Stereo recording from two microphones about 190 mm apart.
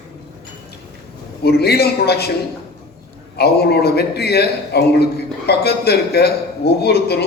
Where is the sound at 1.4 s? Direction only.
55° left (ahead or behind).